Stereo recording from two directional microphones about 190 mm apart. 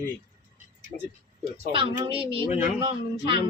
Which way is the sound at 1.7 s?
30° right (ahead or behind).